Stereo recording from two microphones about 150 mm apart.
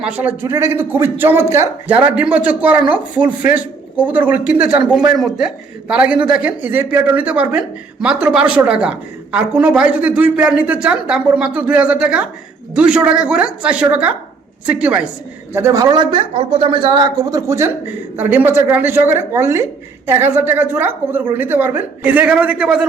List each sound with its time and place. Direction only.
0.0 s a woman's voice: 10° right (ahead or behind)
15.5 s a woman's voice: 20° right (ahead or behind)